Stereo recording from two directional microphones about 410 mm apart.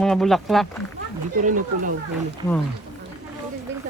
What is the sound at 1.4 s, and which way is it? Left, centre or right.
Speech, centre.